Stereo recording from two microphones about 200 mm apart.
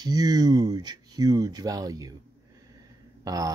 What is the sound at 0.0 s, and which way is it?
Speech, 20° right (ahead or behind).